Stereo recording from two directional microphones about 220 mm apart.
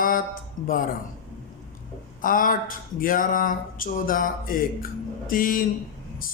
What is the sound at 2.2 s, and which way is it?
Speech, 40° left (ahead or behind).